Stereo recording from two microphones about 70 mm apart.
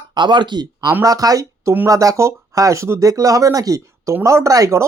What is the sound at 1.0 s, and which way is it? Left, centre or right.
Speech, right.